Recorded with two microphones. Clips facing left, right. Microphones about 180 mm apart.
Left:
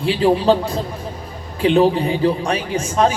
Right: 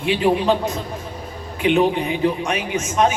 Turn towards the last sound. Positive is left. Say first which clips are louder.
# left 1 dB
turn(degrees=30)  # may be behind; listen again after turning